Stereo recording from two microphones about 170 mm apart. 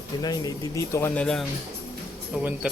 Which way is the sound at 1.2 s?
5° left (ahead or behind).